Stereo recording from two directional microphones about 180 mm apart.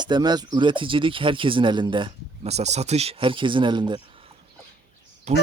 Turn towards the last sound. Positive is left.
turn(degrees=-40)  # may be behind; listen again after turning